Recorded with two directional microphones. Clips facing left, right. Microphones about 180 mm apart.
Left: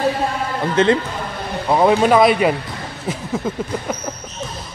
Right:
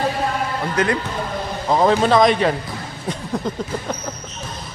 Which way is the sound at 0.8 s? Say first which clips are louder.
Left 6 dB; 25° left (ahead or behind).